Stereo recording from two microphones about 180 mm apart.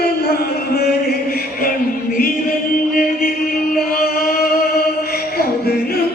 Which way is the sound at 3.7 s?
55° left (ahead or behind).